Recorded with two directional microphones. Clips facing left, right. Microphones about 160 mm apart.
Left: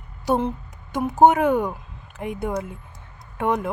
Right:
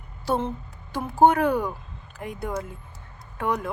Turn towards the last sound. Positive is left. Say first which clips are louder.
# left 4 dB
turn(degrees=25)  # may be behind; listen again after turning